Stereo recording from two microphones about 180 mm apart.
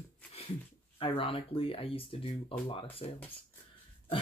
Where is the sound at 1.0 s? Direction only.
30° left (ahead or behind).